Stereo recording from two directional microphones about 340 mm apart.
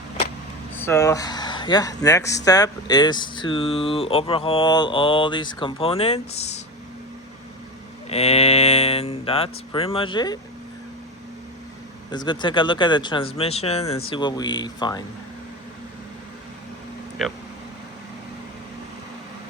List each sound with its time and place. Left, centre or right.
0.8 s speech: centre
8.1 s speech: centre
12.1 s speech: centre
17.2 s speech: centre